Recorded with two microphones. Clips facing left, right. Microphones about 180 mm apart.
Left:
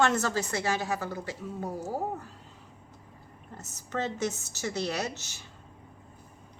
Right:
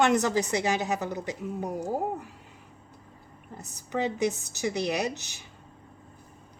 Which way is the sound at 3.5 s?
15° right (ahead or behind).